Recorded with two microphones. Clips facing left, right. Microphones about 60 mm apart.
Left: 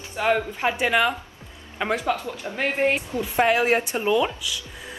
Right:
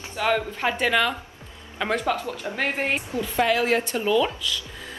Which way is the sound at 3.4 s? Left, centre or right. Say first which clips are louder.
Left 2 dB; left.